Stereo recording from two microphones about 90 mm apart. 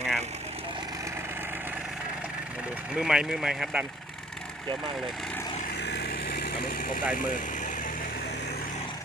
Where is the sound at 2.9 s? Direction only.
10° right (ahead or behind).